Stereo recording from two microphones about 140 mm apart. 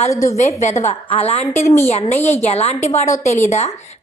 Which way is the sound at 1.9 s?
50° left (ahead or behind).